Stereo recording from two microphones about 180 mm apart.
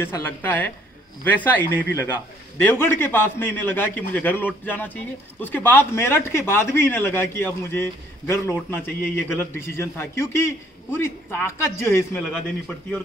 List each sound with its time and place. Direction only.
0.0 s speech: 10° left (ahead or behind)